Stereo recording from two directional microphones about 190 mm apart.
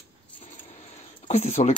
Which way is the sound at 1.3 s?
35° left (ahead or behind).